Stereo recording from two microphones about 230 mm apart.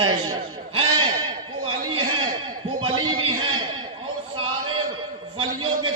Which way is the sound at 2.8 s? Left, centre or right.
Right.